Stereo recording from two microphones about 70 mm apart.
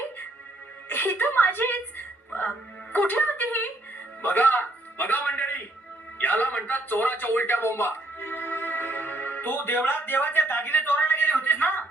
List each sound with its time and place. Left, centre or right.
0.9 s a woman's voice: left